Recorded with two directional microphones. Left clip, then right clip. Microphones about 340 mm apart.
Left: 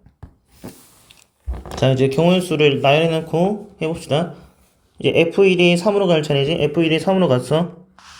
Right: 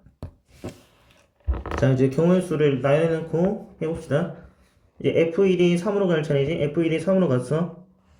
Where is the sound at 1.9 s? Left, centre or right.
Centre.